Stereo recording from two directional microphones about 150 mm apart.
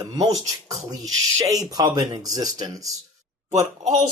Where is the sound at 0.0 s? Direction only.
25° right (ahead or behind).